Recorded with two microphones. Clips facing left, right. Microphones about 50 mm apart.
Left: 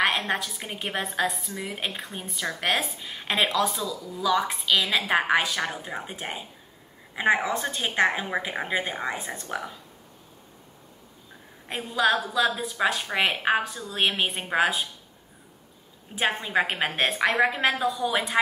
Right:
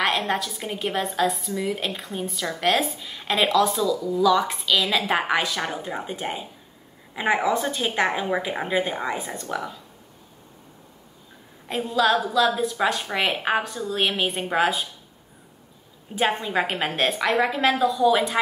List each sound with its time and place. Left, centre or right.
0.2 s a woman's voice: centre
3.4 s a woman's voice: centre
11.7 s a woman's voice: centre
12.5 s a woman's voice: centre
16.2 s a woman's voice: centre